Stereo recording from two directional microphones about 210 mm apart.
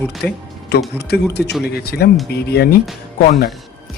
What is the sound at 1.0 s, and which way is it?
Speech, 50° left (ahead or behind).